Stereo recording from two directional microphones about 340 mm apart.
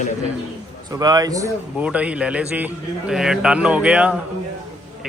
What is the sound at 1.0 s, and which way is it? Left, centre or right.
A man's voice, centre.